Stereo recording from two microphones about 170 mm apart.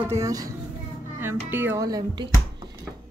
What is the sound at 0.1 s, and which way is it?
Speech, 20° right (ahead or behind).